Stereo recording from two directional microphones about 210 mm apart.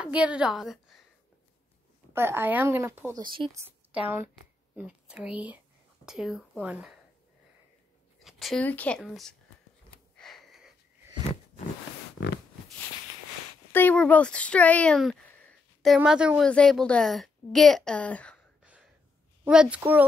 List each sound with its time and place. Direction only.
0.0 s speech: 5° right (ahead or behind)
2.1 s speech: 10° right (ahead or behind)
3.3 s speech: 25° right (ahead or behind)
3.9 s speech: 10° right (ahead or behind)
8.2 s speech: centre (ahead or behind)
10.1 s a sound: centre (ahead or behind)
13.7 s speech: 10° left (ahead or behind)
18.6 s a sound: 5° right (ahead or behind)
19.4 s speech: 5° right (ahead or behind)